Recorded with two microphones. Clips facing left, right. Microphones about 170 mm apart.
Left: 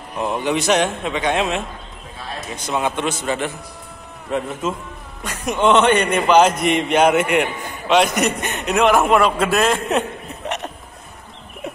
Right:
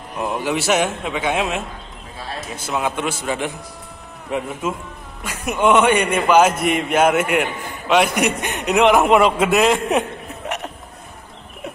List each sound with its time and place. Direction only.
0.2 s a man's voice: 5° right (ahead or behind)